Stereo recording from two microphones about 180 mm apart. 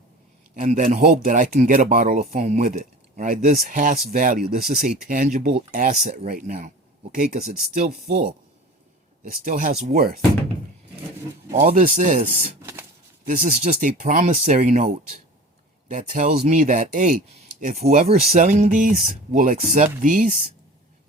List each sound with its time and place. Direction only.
0.5 s speech: 45° right (ahead or behind)
9.3 s speech: 50° right (ahead or behind)
11.6 s speech: 50° right (ahead or behind)
13.6 s speech: 45° right (ahead or behind)